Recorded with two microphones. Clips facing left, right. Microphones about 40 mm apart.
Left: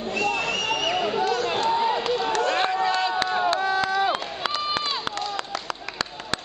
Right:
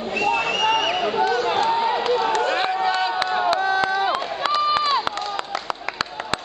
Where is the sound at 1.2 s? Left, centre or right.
Right.